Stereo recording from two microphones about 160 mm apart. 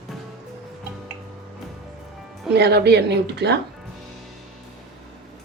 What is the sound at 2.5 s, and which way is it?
A woman's voice, 90° right.